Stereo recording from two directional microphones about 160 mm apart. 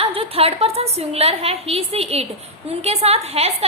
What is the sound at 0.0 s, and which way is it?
A woman's voice, 35° right (ahead or behind).